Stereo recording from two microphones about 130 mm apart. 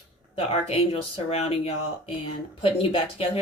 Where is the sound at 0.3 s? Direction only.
50° left (ahead or behind).